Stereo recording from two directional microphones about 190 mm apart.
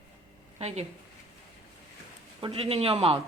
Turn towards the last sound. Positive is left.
turn(degrees=-30)  # may be behind; listen again after turning